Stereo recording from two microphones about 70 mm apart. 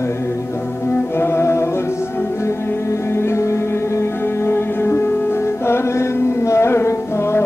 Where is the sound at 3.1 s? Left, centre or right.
Left.